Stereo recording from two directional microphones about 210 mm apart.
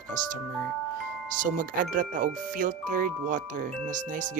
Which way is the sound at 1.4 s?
40° right (ahead or behind).